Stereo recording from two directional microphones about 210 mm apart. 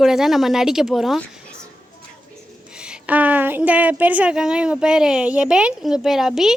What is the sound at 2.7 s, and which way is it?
A woman's voice, 5° right (ahead or behind).